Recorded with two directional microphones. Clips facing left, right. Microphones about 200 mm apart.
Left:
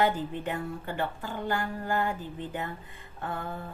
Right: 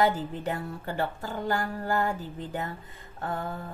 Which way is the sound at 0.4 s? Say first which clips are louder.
Right 1 dB; 40° right (ahead or behind).